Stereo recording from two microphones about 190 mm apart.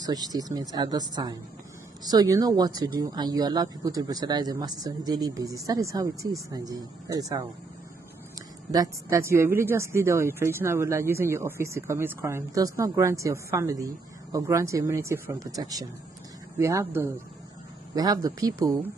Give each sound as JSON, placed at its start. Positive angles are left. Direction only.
{"t": 0.0, "sound": "speech", "side_deg": -20}
{"t": 8.7, "sound": "speech", "side_deg": -15}